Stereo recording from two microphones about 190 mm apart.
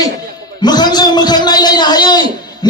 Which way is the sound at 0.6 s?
20° left (ahead or behind).